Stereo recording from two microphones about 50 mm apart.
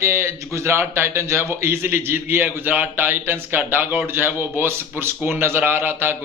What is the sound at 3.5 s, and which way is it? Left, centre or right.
A man's voice, right.